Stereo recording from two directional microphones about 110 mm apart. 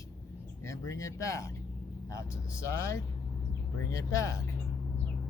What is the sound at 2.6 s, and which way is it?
Speech, 25° left (ahead or behind).